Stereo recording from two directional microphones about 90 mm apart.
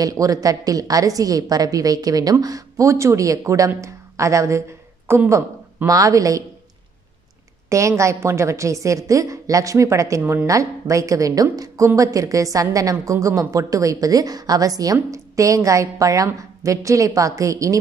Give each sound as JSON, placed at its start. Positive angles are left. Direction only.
{"t": 0.0, "sound": "a woman's voice", "side_deg": -40}
{"t": 7.7, "sound": "a woman's voice", "side_deg": -35}